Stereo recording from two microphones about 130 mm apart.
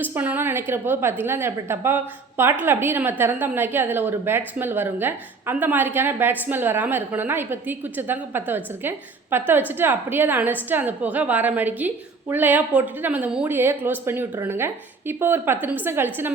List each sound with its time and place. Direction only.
0.0 s a woman's voice: 15° right (ahead or behind)